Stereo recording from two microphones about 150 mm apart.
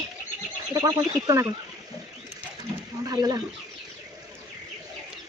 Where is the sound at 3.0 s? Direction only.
25° right (ahead or behind).